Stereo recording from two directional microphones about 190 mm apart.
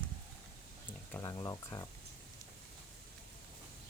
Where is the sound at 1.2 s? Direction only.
20° left (ahead or behind).